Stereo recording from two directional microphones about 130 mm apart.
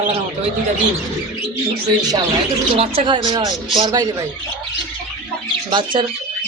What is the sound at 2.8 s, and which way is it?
Speech, 50° right (ahead or behind).